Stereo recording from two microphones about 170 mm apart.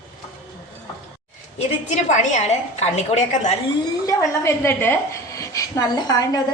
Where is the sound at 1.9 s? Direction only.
45° left (ahead or behind).